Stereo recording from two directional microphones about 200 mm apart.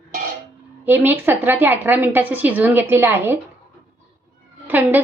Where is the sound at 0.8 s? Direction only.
10° right (ahead or behind).